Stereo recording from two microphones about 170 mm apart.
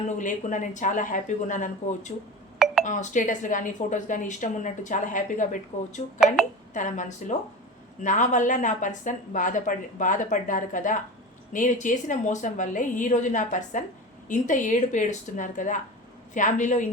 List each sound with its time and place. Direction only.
0.2 s speech: 50° left (ahead or behind)